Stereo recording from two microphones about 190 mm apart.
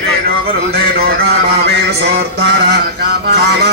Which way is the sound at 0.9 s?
55° right (ahead or behind).